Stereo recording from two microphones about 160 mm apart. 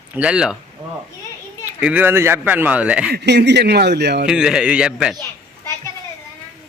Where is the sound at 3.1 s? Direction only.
90° right.